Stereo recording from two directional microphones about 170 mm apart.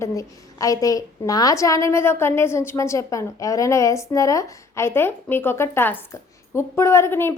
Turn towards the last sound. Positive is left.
turn(degrees=15)  # may be behind; listen again after turning